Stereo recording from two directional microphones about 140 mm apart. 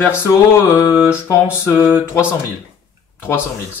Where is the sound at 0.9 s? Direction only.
5° right (ahead or behind).